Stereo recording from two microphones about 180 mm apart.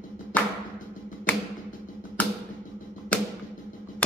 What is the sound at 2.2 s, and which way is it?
Music, 10° left (ahead or behind).